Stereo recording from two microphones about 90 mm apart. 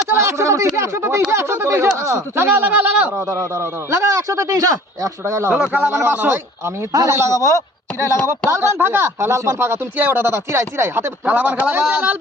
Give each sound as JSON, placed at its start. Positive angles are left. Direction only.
{"t": 0.1, "sound": "speech", "side_deg": -30}
{"t": 3.9, "sound": "speech", "side_deg": -40}
{"t": 5.5, "sound": "a man's voice", "side_deg": -15}
{"t": 5.9, "sound": "speech", "side_deg": -25}
{"t": 6.9, "sound": "speech", "side_deg": -35}
{"t": 11.3, "sound": "speech", "side_deg": -15}